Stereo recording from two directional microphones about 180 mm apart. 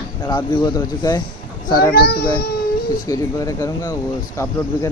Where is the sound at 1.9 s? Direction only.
60° left (ahead or behind).